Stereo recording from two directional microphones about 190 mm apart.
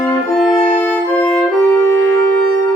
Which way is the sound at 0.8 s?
10° left (ahead or behind).